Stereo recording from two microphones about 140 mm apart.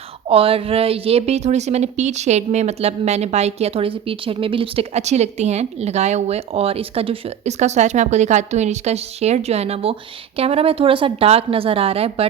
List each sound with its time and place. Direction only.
0.3 s a woman's voice: 40° right (ahead or behind)